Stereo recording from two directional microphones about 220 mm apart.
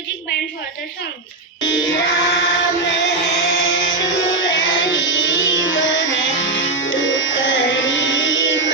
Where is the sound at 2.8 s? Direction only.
55° left (ahead or behind).